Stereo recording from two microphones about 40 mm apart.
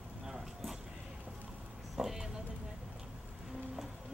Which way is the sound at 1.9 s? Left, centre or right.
Centre.